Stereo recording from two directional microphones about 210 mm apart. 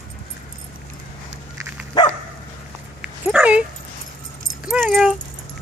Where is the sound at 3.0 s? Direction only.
5° right (ahead or behind).